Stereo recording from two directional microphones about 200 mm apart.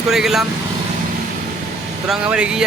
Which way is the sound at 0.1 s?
Centre (ahead or behind).